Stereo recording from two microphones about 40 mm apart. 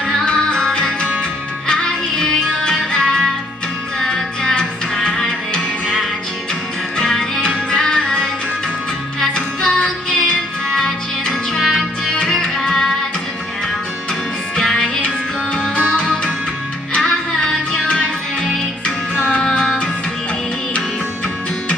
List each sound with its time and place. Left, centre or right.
0.1 s music: left
7.1 s music: centre
9.2 s music: centre
14.6 s music: left
15.9 s music: centre
17.8 s music: left